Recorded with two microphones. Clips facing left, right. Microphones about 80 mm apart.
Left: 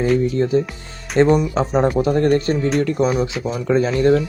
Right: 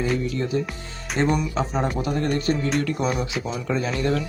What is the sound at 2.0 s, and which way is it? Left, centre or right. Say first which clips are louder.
Speech: left 8 dB; left.